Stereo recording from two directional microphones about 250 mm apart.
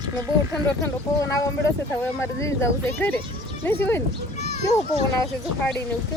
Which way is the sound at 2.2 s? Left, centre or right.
Centre.